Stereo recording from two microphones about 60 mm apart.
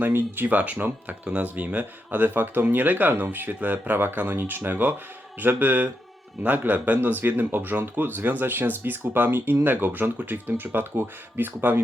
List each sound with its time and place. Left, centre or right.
0.0 s speech: right